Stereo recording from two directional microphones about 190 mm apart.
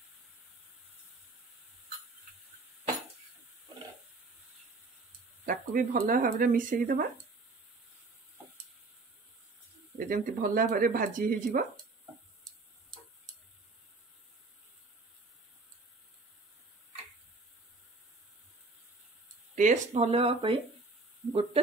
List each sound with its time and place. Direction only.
5.4 s speech: 45° right (ahead or behind)
9.9 s speech: 50° right (ahead or behind)
19.5 s speech: 40° right (ahead or behind)